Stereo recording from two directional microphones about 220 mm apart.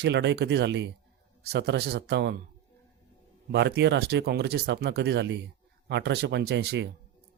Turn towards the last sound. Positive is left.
turn(degrees=-50)  # may be behind; listen again after turning